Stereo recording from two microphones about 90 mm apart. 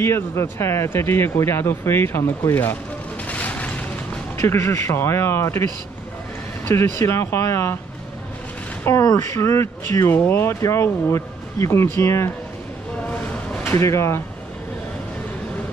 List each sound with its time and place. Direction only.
0.0 s a man's voice: 30° left (ahead or behind)
3.3 s a sound: 15° left (ahead or behind)
4.4 s a man's voice: 30° left (ahead or behind)
9.0 s speech: 40° left (ahead or behind)
13.1 s a sound: 20° left (ahead or behind)
13.7 s speech: 30° left (ahead or behind)